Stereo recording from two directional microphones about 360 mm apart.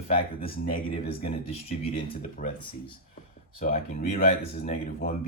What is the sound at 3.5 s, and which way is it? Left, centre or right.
Speech, left.